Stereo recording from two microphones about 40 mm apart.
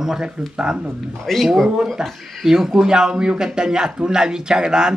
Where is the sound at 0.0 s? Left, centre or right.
Centre.